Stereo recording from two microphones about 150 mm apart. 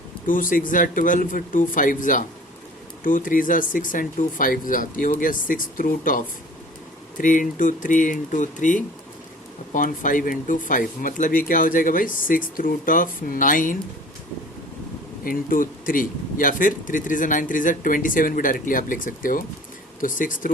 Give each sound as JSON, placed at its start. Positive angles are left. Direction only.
{"t": 0.3, "sound": "a man's voice", "side_deg": 65}
{"t": 15.2, "sound": "a man's voice", "side_deg": 70}